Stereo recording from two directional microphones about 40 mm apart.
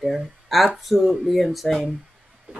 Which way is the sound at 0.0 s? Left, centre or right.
Centre.